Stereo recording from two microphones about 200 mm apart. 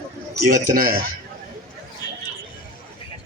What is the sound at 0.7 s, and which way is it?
Speech, 45° right (ahead or behind).